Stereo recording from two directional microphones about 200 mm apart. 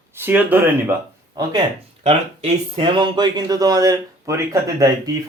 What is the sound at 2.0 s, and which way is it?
Speech, 25° right (ahead or behind).